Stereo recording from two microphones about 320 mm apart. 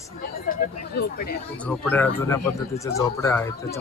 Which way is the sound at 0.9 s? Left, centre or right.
Left.